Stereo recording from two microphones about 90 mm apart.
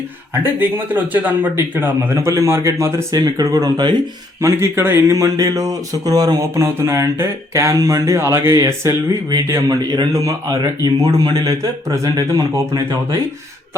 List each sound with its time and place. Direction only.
0.3 s speech: 25° right (ahead or behind); by 3.8 s 40° right (ahead or behind)
4.4 s speech: 30° right (ahead or behind)
5.1 s speech: 40° right (ahead or behind)
6.7 s a man's voice: 35° right (ahead or behind)
12.0 s a man's voice: 50° right (ahead or behind)
12.5 s speech: 35° right (ahead or behind)